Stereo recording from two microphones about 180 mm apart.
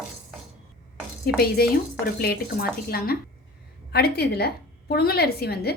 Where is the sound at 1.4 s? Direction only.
60° left (ahead or behind).